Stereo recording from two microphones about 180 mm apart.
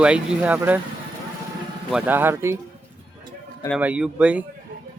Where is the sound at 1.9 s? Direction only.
10° right (ahead or behind).